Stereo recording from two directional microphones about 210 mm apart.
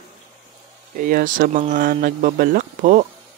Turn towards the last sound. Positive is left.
turn(degrees=-35)  # may be behind; listen again after turning